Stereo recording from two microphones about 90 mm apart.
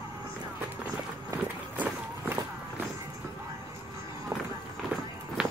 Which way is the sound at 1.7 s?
20° right (ahead or behind).